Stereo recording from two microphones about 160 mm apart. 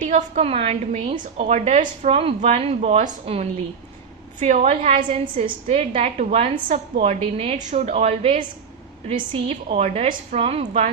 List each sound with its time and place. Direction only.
0.1 s a woman's voice: 45° right (ahead or behind)
2.1 s a woman's voice: 35° right (ahead or behind)
5.4 s a woman's voice: 40° right (ahead or behind)